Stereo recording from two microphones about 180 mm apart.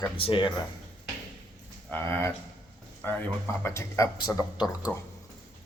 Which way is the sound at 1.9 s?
10° left (ahead or behind).